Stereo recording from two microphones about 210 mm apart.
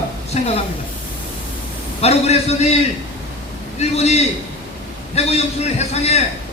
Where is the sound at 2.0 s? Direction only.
30° left (ahead or behind).